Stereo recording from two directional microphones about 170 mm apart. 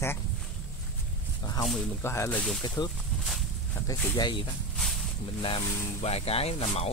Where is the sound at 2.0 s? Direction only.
15° left (ahead or behind).